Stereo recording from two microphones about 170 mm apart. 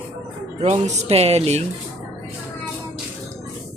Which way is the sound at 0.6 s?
40° right (ahead or behind).